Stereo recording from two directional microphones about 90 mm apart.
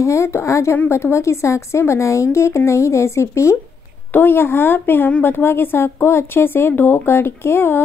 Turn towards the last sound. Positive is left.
turn(degrees=25)  # may be behind; listen again after turning